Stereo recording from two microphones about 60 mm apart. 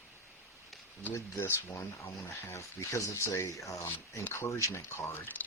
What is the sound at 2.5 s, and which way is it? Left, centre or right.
Speech, left.